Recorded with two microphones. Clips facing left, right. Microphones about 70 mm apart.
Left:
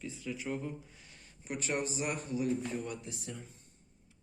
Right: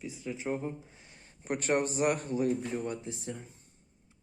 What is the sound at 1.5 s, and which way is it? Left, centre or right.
A man's voice, right.